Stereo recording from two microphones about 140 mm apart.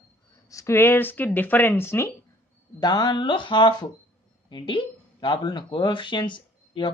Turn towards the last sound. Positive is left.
turn(degrees=35)  # may be behind; listen again after turning